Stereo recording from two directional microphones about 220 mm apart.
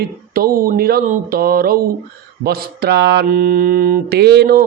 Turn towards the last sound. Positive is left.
turn(degrees=-45)  # may be behind; listen again after turning